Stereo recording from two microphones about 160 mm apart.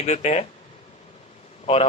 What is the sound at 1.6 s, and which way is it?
Speech, 40° left (ahead or behind).